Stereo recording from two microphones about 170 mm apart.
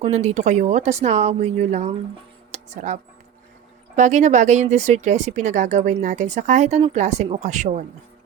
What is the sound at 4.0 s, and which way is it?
Speech, 45° right (ahead or behind).